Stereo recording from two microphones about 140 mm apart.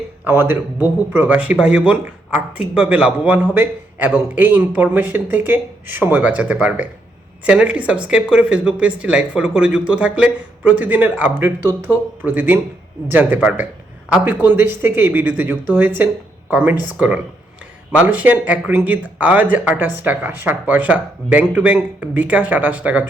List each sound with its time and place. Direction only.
0.3 s speech: 15° right (ahead or behind)
17.9 s speech: 10° right (ahead or behind)